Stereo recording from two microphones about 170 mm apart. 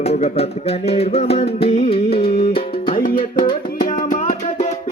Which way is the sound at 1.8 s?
35° left (ahead or behind).